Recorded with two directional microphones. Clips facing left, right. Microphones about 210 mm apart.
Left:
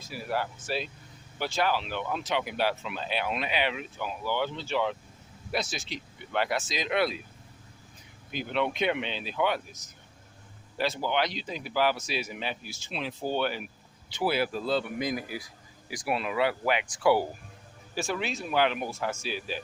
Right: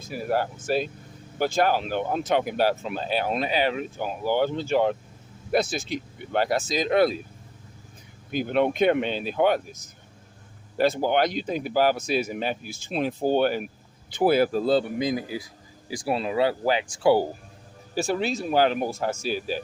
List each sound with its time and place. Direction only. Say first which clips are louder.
0.1 s speech: right 6 dB; 45° right (ahead or behind)
8.3 s speech: right 7 dB; 45° right (ahead or behind)
14.9 s speech: right 5 dB; 25° right (ahead or behind); by 19.6 s 40° right (ahead or behind)